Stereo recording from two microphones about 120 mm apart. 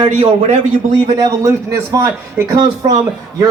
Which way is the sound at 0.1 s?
65° right (ahead or behind).